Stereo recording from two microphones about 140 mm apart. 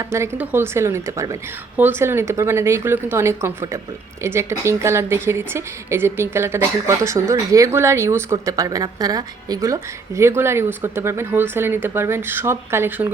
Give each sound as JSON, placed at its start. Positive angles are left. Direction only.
{"t": 0.0, "sound": "speech", "side_deg": -20}